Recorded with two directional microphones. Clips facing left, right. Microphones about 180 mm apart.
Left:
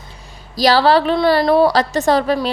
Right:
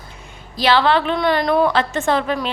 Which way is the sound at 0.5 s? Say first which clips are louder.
Left 3 dB; 40° left (ahead or behind).